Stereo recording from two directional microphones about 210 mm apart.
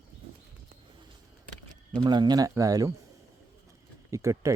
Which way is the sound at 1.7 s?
20° right (ahead or behind).